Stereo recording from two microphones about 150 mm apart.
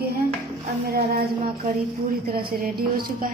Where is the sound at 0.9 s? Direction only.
90° right.